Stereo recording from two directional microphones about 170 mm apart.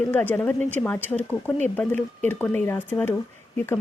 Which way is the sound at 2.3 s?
10° left (ahead or behind).